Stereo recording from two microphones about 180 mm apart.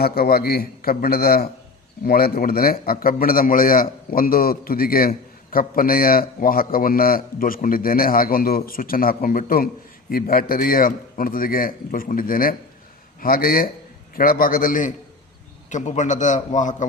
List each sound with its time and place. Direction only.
0.0 s a man's voice: 60° left (ahead or behind)